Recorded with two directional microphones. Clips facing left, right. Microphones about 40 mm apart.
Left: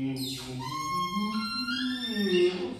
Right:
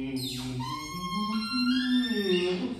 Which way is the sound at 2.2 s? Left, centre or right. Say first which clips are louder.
Left 3 dB; right.